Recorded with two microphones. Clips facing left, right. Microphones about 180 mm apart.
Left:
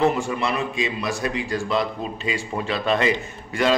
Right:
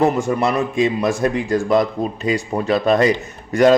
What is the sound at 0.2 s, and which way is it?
A man's voice, 45° right (ahead or behind).